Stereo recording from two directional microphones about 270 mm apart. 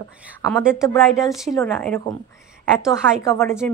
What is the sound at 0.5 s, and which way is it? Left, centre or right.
A woman's voice, centre.